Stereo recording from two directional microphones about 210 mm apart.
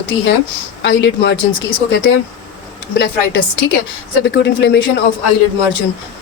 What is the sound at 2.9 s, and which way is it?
A woman's voice, 55° left (ahead or behind).